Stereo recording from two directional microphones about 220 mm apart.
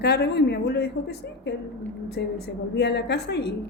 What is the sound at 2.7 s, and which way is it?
Speech, 50° left (ahead or behind).